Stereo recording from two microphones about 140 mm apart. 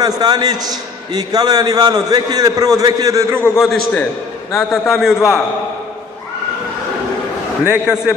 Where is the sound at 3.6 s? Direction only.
Centre (ahead or behind).